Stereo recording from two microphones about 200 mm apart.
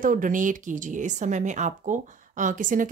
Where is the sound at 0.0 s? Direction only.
40° right (ahead or behind).